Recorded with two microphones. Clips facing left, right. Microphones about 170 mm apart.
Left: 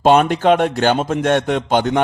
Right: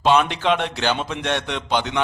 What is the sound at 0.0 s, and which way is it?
Speech, 45° left (ahead or behind).